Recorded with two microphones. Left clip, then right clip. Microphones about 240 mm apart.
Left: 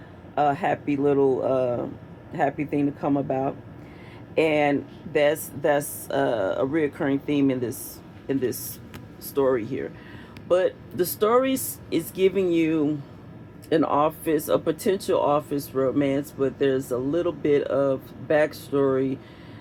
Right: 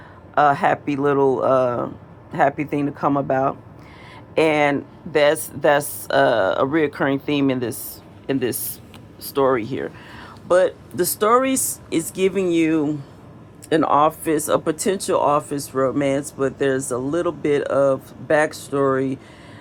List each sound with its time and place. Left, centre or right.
0.3 s speech: right